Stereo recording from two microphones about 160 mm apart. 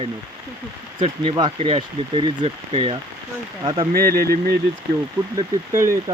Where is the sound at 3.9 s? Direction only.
70° right (ahead or behind).